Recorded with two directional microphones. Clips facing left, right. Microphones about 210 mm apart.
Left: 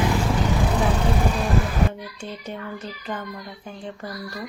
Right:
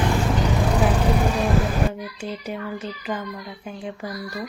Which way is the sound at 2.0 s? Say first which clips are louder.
Right 4 dB; 5° right (ahead or behind).